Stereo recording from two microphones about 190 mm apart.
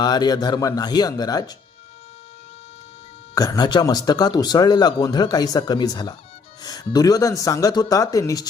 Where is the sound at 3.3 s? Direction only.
20° left (ahead or behind).